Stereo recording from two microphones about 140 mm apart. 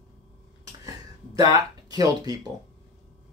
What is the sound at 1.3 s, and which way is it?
Speech, 30° right (ahead or behind).